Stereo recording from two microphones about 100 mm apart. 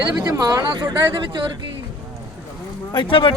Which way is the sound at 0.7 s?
50° right (ahead or behind).